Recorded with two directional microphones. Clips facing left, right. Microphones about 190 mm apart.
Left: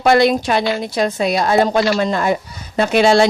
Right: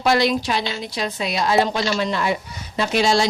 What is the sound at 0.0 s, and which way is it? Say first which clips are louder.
A woman's voice: left 5 dB; 55° left (ahead or behind).